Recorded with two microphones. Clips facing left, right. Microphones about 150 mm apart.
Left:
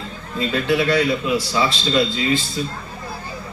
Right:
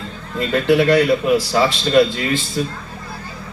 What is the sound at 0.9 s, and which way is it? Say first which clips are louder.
Speech: right 5 dB; 50° right (ahead or behind).